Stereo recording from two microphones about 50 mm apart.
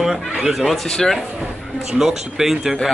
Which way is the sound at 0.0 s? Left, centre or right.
Centre.